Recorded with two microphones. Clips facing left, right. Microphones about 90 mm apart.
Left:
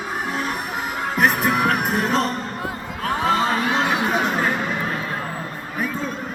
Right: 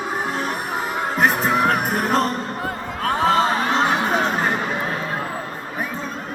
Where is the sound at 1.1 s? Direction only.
30° right (ahead or behind).